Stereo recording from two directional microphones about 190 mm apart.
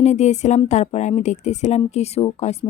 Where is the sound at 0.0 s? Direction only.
35° left (ahead or behind).